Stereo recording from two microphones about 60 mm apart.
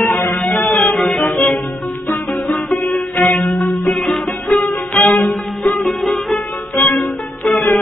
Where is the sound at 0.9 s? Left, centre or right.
Centre.